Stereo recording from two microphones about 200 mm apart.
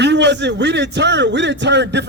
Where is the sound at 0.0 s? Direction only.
60° right (ahead or behind).